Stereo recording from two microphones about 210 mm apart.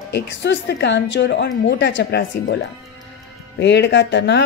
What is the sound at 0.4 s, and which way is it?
Speech, 50° left (ahead or behind).